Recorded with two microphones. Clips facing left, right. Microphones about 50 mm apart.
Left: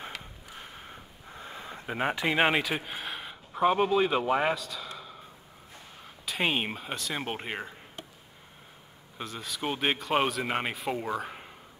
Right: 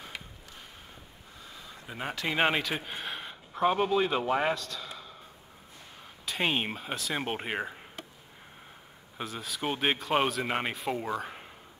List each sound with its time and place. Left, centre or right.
0.9 s a sound: left
2.1 s speech: centre
6.2 s speech: centre
9.2 s speech: centre